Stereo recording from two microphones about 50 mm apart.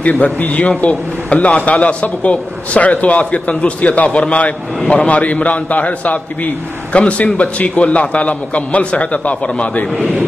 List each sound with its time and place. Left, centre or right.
0.0 s a man's voice: left